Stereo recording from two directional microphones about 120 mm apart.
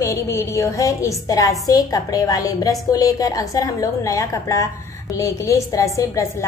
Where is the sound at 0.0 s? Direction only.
25° left (ahead or behind).